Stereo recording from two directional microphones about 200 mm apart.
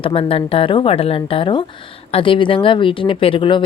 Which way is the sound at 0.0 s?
25° left (ahead or behind).